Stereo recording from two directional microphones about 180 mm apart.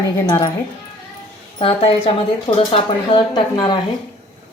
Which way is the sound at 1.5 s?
30° left (ahead or behind).